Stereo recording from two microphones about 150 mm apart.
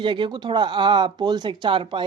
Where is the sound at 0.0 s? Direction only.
30° right (ahead or behind).